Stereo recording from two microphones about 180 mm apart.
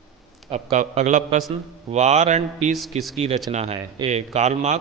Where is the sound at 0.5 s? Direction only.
40° right (ahead or behind).